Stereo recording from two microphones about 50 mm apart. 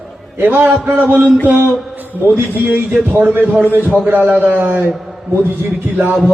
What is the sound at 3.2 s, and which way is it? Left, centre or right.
A man's voice, right.